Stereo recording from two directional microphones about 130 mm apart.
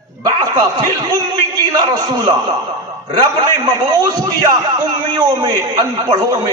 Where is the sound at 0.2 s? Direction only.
30° right (ahead or behind).